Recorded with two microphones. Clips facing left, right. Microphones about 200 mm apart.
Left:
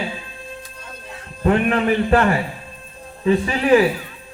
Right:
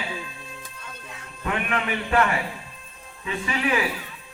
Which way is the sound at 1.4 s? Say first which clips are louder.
Left 10 dB; 35° left (ahead or behind).